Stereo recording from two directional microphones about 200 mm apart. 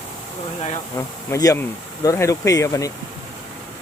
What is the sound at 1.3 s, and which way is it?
Speech, 15° left (ahead or behind).